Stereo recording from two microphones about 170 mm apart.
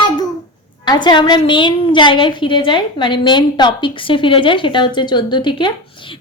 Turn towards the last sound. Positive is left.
turn(degrees=25)  # may be behind; listen again after turning